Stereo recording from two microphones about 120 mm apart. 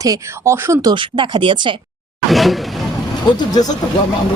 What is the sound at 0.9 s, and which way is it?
Speech, 40° right (ahead or behind).